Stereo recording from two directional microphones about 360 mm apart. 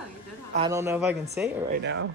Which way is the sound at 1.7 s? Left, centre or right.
Right.